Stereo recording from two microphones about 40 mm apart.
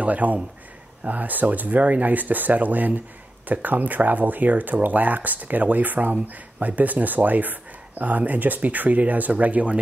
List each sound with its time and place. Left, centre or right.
0.0 s speech: right